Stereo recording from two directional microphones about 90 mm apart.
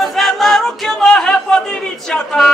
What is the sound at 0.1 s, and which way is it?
Music, centre (ahead or behind).